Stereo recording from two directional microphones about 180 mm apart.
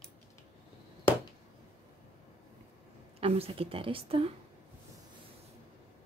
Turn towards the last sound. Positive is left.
turn(degrees=-30)  # may be behind; listen again after turning